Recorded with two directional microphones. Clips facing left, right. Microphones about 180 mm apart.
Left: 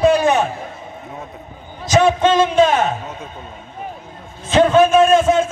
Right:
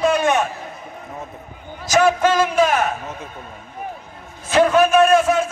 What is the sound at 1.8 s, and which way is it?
A man's voice, 25° left (ahead or behind).